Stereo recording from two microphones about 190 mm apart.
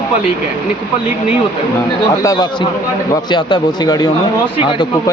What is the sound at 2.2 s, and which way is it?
A man's voice, 20° left (ahead or behind).